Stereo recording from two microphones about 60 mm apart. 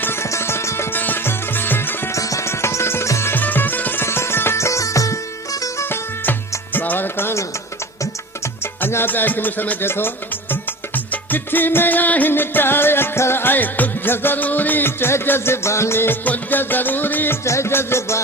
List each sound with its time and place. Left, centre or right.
0.0 s music: left
0.9 s music: left
2.1 s music: left
2.5 s music: left
3.3 s music: left
4.0 s music: left
5.8 s music: left
8.8 s music: left
16.2 s music: left
17.4 s music: left